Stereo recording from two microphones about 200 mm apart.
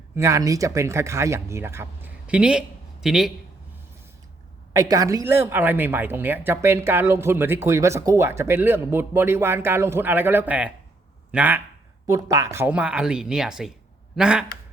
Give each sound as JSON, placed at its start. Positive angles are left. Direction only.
{"t": 0.2, "sound": "speech", "side_deg": -15}
{"t": 4.8, "sound": "speech", "side_deg": -15}